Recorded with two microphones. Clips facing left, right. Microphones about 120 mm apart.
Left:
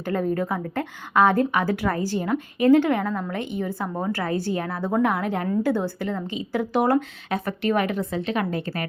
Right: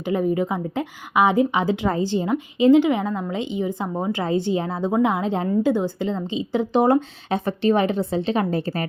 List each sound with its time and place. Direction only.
0.0 s a woman's voice: 15° right (ahead or behind); by 8.9 s 35° right (ahead or behind)